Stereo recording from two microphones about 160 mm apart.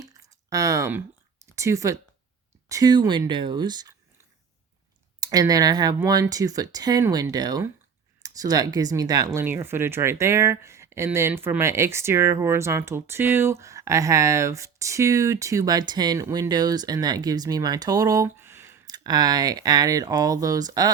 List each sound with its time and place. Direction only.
0.0 s a sound: 20° right (ahead or behind)
1.5 s speech: 20° right (ahead or behind)
5.2 s speech: 25° right (ahead or behind)
18.9 s speech: 25° right (ahead or behind)